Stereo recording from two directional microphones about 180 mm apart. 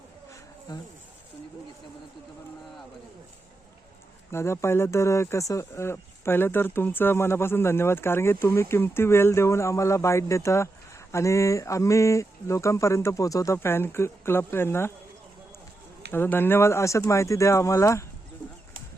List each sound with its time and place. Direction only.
0.7 s speech: 20° left (ahead or behind)
4.3 s speech: 15° left (ahead or behind)
16.1 s speech: 10° left (ahead or behind)